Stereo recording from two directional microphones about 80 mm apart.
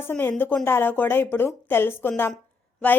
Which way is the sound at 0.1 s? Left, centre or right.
Left.